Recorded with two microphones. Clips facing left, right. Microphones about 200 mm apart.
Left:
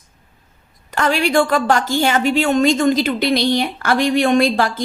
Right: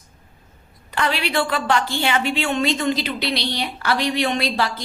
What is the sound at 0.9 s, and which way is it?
A woman's voice, 45° left (ahead or behind).